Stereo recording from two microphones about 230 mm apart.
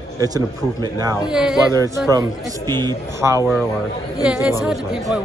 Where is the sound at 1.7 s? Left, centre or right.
Centre.